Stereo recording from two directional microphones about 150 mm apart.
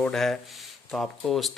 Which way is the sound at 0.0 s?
Centre (ahead or behind).